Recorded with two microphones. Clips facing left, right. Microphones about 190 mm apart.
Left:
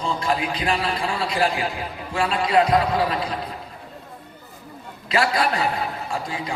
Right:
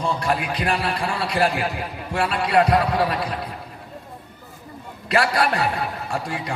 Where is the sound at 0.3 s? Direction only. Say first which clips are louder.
Left 2 dB; 60° right (ahead or behind).